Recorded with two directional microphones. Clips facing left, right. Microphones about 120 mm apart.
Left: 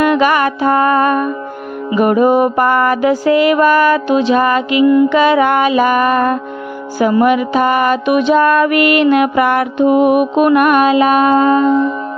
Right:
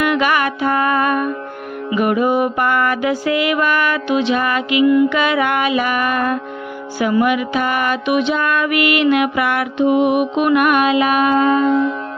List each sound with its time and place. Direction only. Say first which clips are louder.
0.0 s music: left 5 dB; 35° left (ahead or behind)